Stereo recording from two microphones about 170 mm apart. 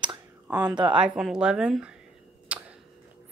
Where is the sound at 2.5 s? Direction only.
5° right (ahead or behind).